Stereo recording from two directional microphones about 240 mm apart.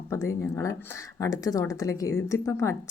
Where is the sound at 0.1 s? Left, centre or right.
Centre.